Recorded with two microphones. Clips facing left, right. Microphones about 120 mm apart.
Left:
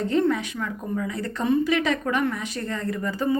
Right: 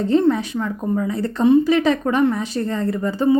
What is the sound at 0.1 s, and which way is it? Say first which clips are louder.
Speech: right 7 dB; 30° right (ahead or behind).